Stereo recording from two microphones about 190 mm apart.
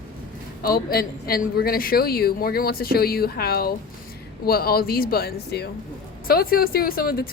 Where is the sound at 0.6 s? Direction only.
55° left (ahead or behind).